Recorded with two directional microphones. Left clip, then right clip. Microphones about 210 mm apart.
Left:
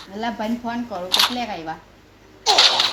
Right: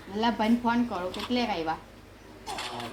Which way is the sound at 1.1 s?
45° left (ahead or behind).